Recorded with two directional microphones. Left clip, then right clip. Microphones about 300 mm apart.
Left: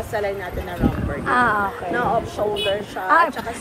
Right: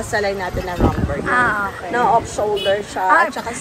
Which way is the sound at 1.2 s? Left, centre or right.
Centre.